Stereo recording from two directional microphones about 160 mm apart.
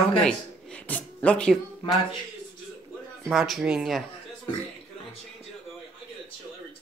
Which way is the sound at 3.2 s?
Centre (ahead or behind).